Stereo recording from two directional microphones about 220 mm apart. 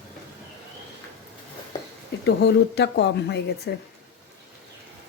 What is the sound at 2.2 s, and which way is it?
Speech, 50° left (ahead or behind).